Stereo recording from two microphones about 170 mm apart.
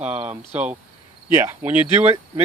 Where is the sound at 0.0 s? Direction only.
10° right (ahead or behind).